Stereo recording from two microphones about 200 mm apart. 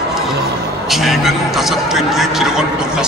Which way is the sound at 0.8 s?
Centre (ahead or behind).